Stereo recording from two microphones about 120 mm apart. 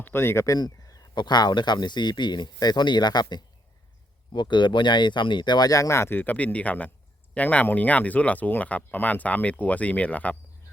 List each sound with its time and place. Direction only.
0.0 s speech: 20° left (ahead or behind)